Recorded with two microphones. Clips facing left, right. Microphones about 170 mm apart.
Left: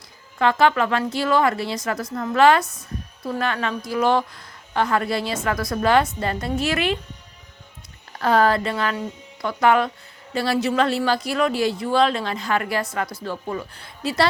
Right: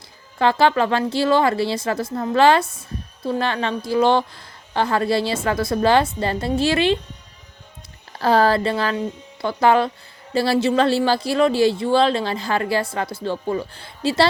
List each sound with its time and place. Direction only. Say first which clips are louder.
0.3 s speech: right 1 dB; 30° right (ahead or behind)
8.2 s speech: right 2 dB; 30° right (ahead or behind)